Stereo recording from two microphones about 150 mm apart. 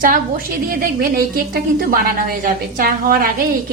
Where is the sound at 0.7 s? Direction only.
80° right.